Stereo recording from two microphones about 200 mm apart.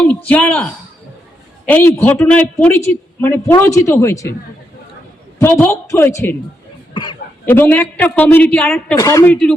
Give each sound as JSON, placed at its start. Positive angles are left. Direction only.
{"t": 0.0, "sound": "a woman's voice", "side_deg": 5}
{"t": 1.7, "sound": "a woman's voice", "side_deg": 10}
{"t": 5.4, "sound": "a woman's voice", "side_deg": 10}
{"t": 7.4, "sound": "a woman's voice", "side_deg": 10}
{"t": 9.0, "sound": "a woman's voice", "side_deg": 15}